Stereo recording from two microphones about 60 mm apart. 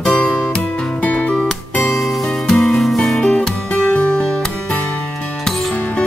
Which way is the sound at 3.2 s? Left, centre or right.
Centre.